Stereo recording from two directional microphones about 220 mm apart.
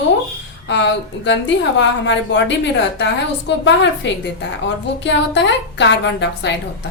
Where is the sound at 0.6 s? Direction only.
55° left (ahead or behind).